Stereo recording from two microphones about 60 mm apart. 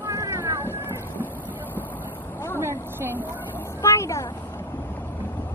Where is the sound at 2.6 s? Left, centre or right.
Right.